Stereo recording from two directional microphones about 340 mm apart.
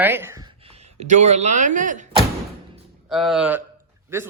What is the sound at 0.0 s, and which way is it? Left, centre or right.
A woman's voice, centre.